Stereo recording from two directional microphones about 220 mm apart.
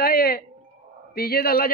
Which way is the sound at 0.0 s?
45° left (ahead or behind).